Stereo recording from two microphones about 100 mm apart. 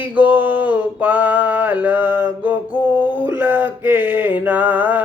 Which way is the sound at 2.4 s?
15° right (ahead or behind).